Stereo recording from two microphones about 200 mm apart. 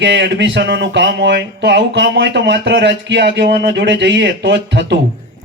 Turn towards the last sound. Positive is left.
turn(degrees=-60)  # may be behind; listen again after turning